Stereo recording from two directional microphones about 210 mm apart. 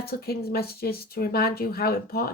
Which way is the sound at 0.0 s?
45° left (ahead or behind).